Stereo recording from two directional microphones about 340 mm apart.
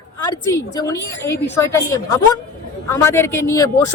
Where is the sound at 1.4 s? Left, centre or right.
Left.